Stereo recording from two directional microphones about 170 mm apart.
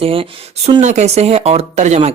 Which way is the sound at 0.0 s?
35° right (ahead or behind).